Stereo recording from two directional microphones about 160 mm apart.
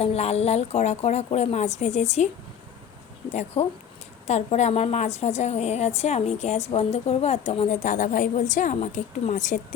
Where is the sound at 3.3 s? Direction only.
45° left (ahead or behind).